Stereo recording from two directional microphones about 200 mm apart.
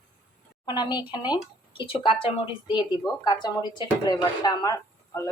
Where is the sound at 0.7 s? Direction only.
20° left (ahead or behind).